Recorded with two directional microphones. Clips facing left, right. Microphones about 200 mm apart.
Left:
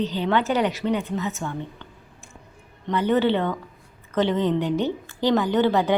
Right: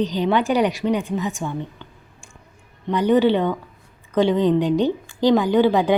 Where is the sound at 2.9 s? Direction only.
15° right (ahead or behind).